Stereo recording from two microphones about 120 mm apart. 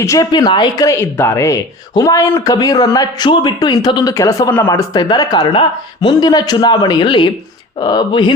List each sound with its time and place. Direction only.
0.0 s speech: 25° left (ahead or behind)
0.3 s speech: 35° left (ahead or behind)
0.9 s speech: 20° left (ahead or behind); by 8.3 s 35° left (ahead or behind)